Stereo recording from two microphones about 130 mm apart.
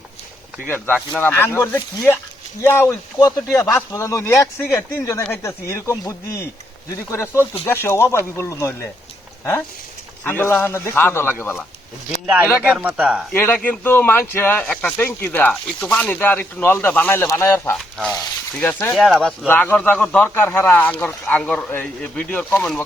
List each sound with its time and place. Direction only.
0.9 s speech: 10° left (ahead or behind)
12.6 s speech: 10° right (ahead or behind)
13.3 s speech: 15° left (ahead or behind)
17.7 s speech: centre (ahead or behind)
18.6 s speech: 15° left (ahead or behind)
19.5 s speech: 15° left (ahead or behind)